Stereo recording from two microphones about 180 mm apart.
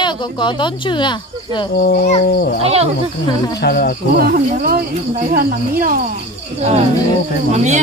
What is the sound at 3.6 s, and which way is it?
Speech, 60° left (ahead or behind).